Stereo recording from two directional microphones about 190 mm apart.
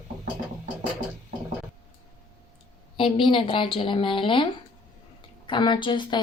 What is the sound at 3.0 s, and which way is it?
A woman's voice, 25° left (ahead or behind).